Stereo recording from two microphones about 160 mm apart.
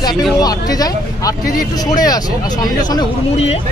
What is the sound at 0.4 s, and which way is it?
Speech, 25° left (ahead or behind).